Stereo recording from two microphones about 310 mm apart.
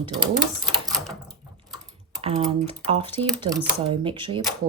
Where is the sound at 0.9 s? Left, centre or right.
Centre.